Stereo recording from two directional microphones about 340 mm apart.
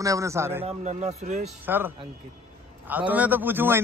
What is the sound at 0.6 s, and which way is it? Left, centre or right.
Speech, centre.